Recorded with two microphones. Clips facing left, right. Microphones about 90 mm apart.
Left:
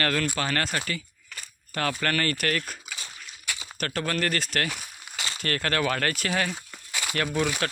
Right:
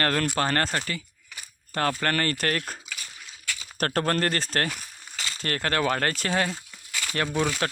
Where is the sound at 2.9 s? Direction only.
20° left (ahead or behind).